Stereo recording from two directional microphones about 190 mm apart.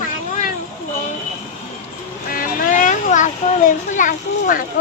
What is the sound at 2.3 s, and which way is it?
A child's voice, 45° left (ahead or behind).